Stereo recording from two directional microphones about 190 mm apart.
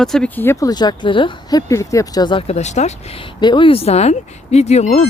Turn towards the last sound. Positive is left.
turn(degrees=35)  # may be behind; listen again after turning